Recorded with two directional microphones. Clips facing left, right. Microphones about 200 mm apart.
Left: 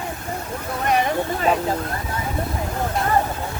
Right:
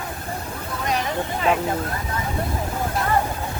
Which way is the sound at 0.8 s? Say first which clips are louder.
Left 5 dB; 55° left (ahead or behind).